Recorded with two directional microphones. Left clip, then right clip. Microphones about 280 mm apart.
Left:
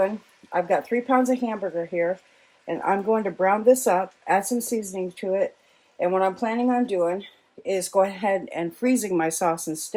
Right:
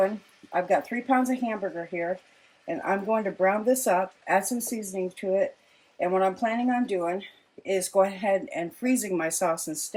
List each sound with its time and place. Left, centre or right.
0.5 s speech: left
2.6 s speech: left